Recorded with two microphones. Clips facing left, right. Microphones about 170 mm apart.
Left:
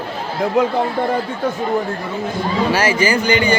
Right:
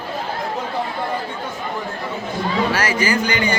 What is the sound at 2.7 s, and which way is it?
Speech, 25° left (ahead or behind).